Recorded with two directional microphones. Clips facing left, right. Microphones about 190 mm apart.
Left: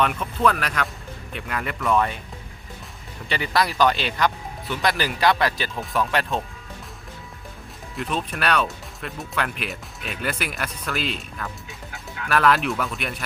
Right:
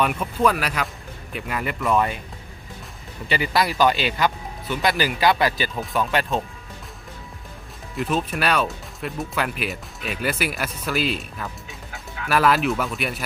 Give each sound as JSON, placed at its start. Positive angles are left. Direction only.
{"t": 0.0, "sound": "speech", "side_deg": -10}
{"t": 3.2, "sound": "speech", "side_deg": -5}
{"t": 7.9, "sound": "speech", "side_deg": -5}